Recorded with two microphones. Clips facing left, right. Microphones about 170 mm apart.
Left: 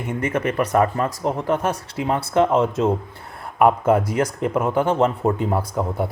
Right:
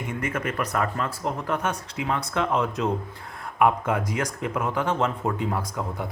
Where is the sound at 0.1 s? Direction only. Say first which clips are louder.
Left 7 dB; 30° left (ahead or behind).